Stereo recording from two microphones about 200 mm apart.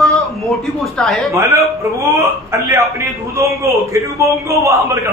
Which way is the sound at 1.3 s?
15° right (ahead or behind).